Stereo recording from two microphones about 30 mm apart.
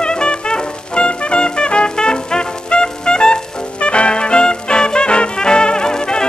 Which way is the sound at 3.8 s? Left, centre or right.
Left.